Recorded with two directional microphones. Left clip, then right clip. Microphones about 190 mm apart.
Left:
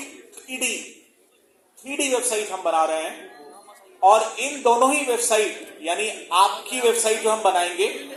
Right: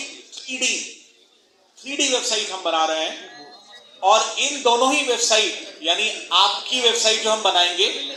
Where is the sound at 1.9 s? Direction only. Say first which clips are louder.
Right 2 dB; 50° right (ahead or behind).